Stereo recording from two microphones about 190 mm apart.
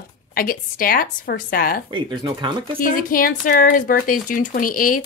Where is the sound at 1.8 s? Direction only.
25° right (ahead or behind).